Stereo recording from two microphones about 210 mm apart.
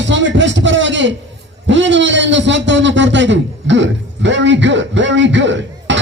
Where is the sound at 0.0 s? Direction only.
60° right (ahead or behind).